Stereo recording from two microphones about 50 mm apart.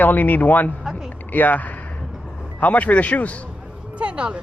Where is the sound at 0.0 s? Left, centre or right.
Left.